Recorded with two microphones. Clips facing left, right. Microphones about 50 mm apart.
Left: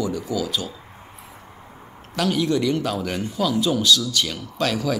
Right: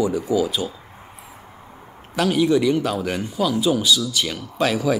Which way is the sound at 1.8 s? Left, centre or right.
Centre.